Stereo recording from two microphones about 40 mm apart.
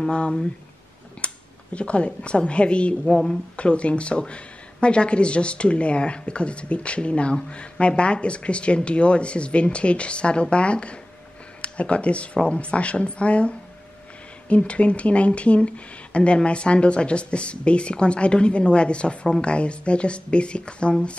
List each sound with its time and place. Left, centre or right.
0.1 s speech: left